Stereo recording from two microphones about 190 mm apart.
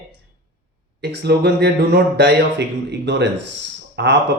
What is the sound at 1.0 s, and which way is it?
Speech, 60° right (ahead or behind).